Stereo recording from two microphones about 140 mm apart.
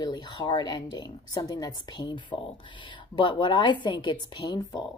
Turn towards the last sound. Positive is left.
turn(degrees=30)  # may be behind; listen again after turning